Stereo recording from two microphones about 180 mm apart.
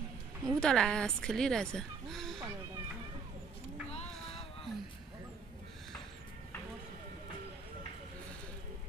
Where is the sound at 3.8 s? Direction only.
35° left (ahead or behind).